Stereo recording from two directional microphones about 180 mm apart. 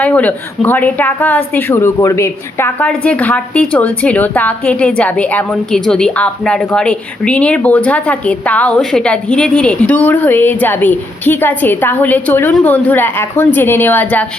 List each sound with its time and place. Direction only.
0.0 s a woman's voice: 10° left (ahead or behind)